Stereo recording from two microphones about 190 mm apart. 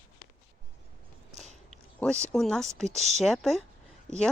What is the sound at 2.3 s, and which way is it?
Speech, 5° left (ahead or behind).